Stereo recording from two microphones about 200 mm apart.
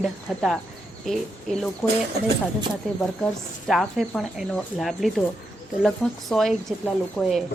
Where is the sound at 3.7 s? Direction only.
Centre (ahead or behind).